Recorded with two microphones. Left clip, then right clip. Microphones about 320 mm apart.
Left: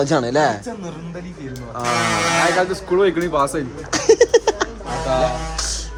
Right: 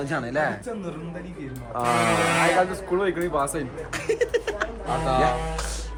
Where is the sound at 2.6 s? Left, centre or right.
Left.